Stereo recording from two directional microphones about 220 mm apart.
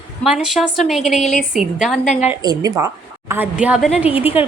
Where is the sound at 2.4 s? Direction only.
15° right (ahead or behind).